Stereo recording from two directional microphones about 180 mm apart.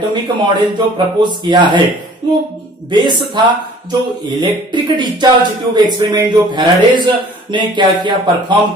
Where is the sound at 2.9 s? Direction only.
25° right (ahead or behind).